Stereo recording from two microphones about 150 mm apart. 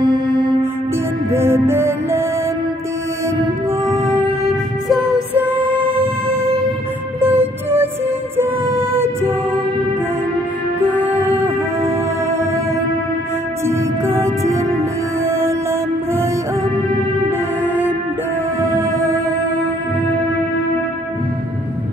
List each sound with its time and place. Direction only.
0.0 s music: 30° right (ahead or behind)
1.3 s music: 15° right (ahead or behind)
5.3 s music: 10° right (ahead or behind)
7.2 s music: 15° right (ahead or behind)
11.0 s music: 10° right (ahead or behind)
13.7 s music: 20° right (ahead or behind)
18.7 s music: 20° right (ahead or behind)